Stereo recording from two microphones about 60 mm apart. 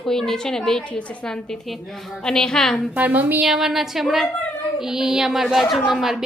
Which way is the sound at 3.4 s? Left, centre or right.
Centre.